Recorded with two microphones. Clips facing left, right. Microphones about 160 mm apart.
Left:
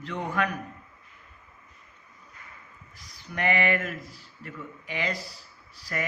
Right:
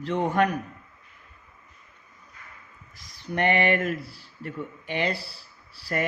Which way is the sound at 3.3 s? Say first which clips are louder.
Right 3 dB; 30° right (ahead or behind).